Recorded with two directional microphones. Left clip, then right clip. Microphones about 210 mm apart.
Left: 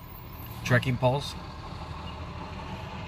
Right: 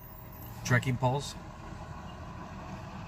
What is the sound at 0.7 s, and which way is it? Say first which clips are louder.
Speech: left 4 dB; centre (ahead or behind).